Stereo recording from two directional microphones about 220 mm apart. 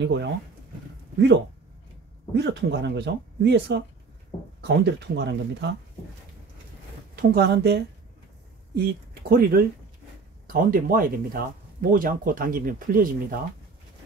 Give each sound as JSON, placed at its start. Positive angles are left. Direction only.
{"t": 0.0, "sound": "speech", "side_deg": -55}
{"t": 2.3, "sound": "speech", "side_deg": -50}
{"t": 7.2, "sound": "speech", "side_deg": -45}